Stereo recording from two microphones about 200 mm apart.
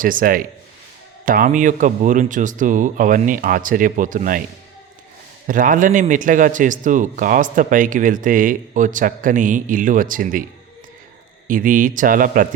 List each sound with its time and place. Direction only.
0.0 s a man's voice: 45° right (ahead or behind)
5.5 s speech: 40° right (ahead or behind)
11.4 s a man's voice: 40° right (ahead or behind)